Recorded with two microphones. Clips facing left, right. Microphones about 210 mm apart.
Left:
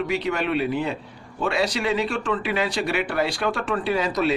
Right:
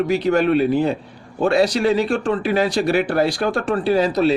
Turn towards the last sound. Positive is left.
turn(degrees=-30)  # may be behind; listen again after turning